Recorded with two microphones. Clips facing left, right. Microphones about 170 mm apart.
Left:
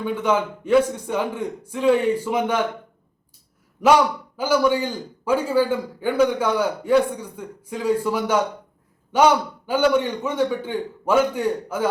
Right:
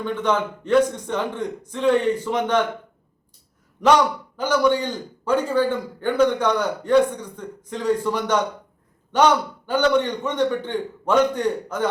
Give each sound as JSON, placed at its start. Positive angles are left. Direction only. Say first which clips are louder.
{"t": 0.0, "sound": "a man's voice", "louder": "left 1 dB", "side_deg": 10}
{"t": 3.8, "sound": "a man's voice", "louder": "left 1 dB", "side_deg": 10}